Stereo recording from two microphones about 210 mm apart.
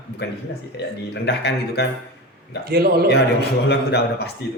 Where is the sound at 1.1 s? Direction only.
55° left (ahead or behind).